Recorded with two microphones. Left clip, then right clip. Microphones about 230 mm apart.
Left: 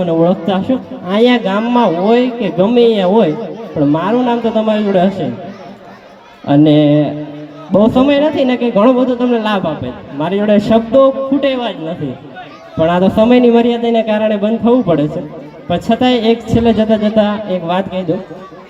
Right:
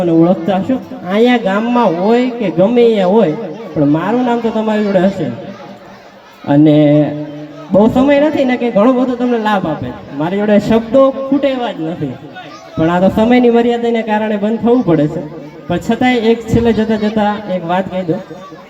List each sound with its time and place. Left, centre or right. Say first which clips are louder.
0.0 s a man's voice: right 1 dB; left
6.5 s a man's voice: even; left
12.8 s a man's voice: left 1 dB; left